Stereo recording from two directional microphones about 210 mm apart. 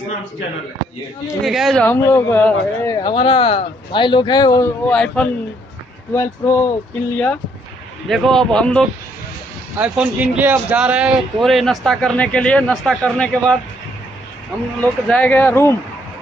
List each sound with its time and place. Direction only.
1.4 s speech: centre (ahead or behind)
8.1 s speech: centre (ahead or behind)
9.8 s speech: 5° right (ahead or behind)
14.8 s speech: 5° left (ahead or behind)